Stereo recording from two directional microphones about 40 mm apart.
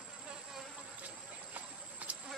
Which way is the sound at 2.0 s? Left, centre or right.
Right.